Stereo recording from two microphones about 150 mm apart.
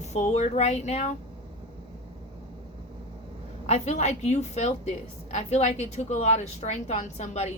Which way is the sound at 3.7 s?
50° left (ahead or behind).